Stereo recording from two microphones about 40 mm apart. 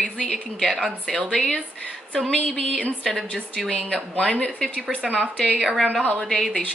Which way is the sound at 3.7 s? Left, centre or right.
Left.